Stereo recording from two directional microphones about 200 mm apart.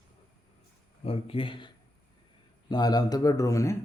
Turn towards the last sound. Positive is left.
turn(degrees=15)  # may be behind; listen again after turning